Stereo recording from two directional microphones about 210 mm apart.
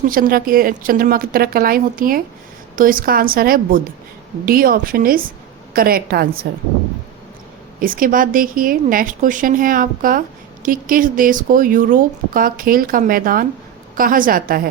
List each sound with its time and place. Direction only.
0.1 s a woman's voice: 45° right (ahead or behind)
7.8 s a woman's voice: 40° right (ahead or behind)